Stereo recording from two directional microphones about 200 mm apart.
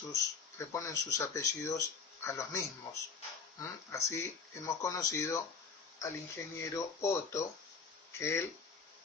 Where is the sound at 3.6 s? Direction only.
15° left (ahead or behind).